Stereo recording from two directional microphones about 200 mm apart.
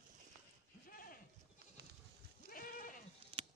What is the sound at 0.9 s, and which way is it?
Clip-clop, 45° left (ahead or behind).